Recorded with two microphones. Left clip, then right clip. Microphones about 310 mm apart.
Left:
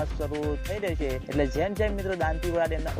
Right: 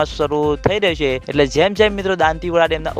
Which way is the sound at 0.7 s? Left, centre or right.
Right.